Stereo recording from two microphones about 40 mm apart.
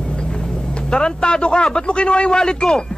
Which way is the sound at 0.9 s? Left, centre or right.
Left.